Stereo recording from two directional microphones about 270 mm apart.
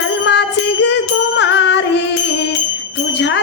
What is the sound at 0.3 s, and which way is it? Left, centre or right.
Music, left.